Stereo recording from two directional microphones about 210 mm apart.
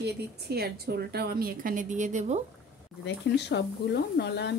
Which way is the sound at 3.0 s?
55° left (ahead or behind).